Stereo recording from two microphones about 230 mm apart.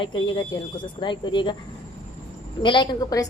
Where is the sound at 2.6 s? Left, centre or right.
Centre.